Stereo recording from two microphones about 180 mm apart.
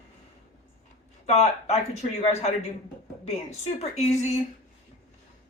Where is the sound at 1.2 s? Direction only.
35° left (ahead or behind).